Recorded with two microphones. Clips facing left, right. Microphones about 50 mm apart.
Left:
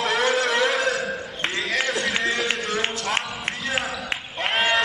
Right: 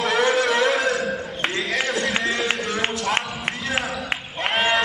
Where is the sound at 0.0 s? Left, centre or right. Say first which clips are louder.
Right 2 dB; centre.